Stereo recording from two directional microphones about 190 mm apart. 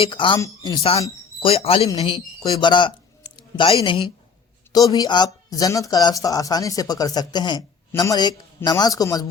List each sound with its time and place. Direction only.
0.0 s speech: 25° left (ahead or behind)
3.3 s a sound: 25° left (ahead or behind)
4.7 s speech: 20° left (ahead or behind)